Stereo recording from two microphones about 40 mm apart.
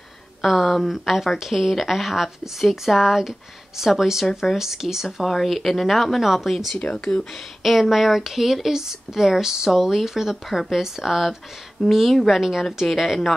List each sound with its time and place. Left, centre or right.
0.4 s a woman's voice: centre
6.8 s speech: left
7.6 s a woman's voice: centre